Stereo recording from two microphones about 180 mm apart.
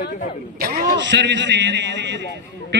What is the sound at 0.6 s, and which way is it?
Speech, 55° right (ahead or behind).